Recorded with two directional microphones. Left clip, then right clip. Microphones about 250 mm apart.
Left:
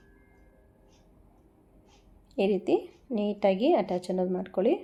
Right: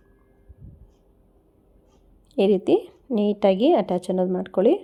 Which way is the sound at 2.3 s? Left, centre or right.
Right.